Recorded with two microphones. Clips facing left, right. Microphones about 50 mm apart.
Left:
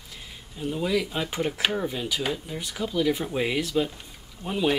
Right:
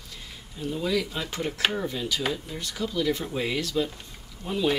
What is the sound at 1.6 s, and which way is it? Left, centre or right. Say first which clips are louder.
Speech: right 1 dB; centre.